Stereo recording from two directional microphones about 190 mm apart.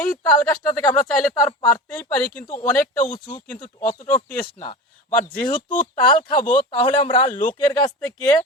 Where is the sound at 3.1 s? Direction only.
25° left (ahead or behind).